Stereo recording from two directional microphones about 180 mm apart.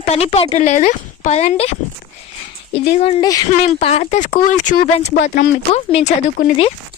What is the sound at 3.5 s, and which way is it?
A woman's voice, 40° left (ahead or behind).